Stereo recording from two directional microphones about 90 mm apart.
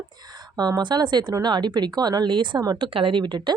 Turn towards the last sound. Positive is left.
turn(degrees=-55)  # may be behind; listen again after turning